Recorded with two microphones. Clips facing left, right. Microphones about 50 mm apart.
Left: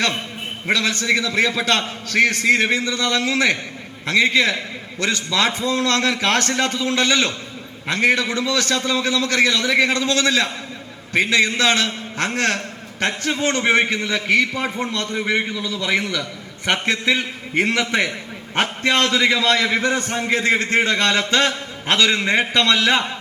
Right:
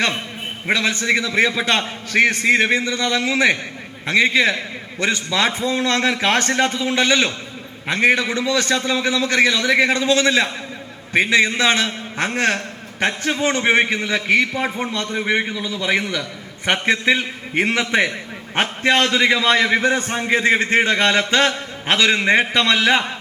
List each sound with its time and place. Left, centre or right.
0.7 s a man's voice: right
18.9 s a man's voice: centre